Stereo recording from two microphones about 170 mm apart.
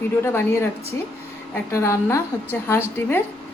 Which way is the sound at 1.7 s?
15° left (ahead or behind).